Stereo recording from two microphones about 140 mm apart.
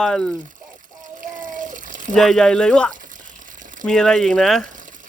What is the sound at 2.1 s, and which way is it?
Speech, 5° left (ahead or behind).